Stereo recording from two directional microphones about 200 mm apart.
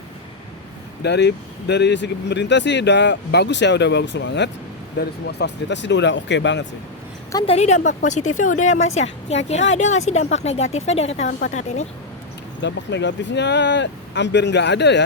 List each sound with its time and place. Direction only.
1.0 s speech: 55° left (ahead or behind)
7.3 s a woman's voice: 30° left (ahead or behind)
11.3 s speech: 45° left (ahead or behind)
12.6 s speech: 60° left (ahead or behind)